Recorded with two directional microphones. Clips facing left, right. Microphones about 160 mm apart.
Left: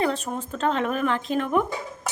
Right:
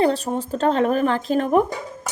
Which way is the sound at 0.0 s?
35° right (ahead or behind).